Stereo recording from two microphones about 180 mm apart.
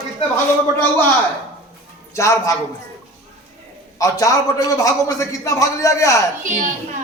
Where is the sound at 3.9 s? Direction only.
20° left (ahead or behind).